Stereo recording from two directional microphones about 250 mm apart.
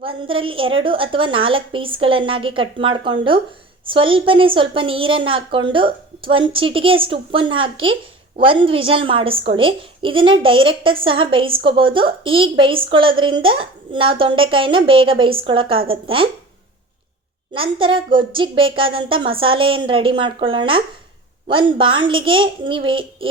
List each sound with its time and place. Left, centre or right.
0.0 s a woman's voice: right
17.5 s a woman's voice: centre